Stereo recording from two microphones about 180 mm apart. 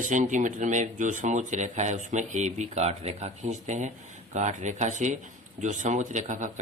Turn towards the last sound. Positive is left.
turn(degrees=-40)  # may be behind; listen again after turning